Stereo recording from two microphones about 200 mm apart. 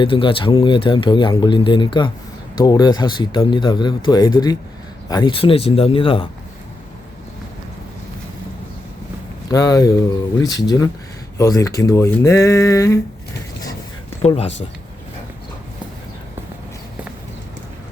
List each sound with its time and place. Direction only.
0.0 s speech: 25° left (ahead or behind)
9.5 s speech: 15° left (ahead or behind)
14.2 s speech: 30° left (ahead or behind)